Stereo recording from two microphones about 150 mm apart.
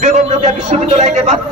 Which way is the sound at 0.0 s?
50° right (ahead or behind).